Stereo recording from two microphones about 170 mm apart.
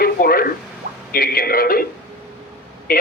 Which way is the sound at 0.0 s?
60° left (ahead or behind).